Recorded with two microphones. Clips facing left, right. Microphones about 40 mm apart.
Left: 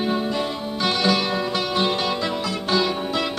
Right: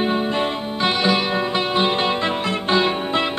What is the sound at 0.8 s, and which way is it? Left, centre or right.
Music, right.